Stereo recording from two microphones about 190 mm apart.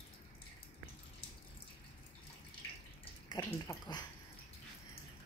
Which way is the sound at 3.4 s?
15° left (ahead or behind).